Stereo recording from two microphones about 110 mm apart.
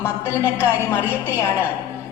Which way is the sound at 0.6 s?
20° left (ahead or behind).